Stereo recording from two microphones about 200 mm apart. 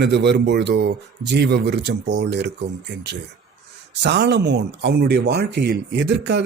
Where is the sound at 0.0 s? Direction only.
55° right (ahead or behind).